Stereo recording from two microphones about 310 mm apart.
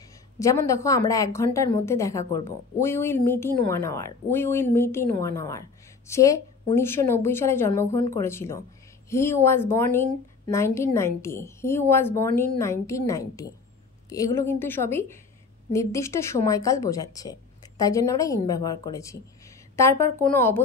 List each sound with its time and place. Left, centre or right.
0.4 s speech: centre